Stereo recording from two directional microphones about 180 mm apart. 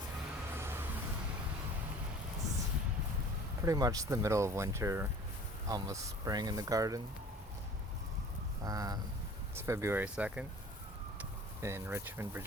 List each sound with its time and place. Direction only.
0.5 s vehicle: 10° right (ahead or behind)
3.7 s speech: 20° right (ahead or behind)
8.6 s speech: 20° right (ahead or behind)